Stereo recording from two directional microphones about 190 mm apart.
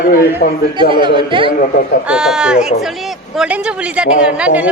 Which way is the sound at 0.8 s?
25° right (ahead or behind).